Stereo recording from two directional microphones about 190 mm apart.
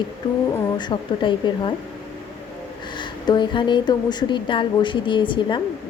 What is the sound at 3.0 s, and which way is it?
A woman's voice, 25° left (ahead or behind).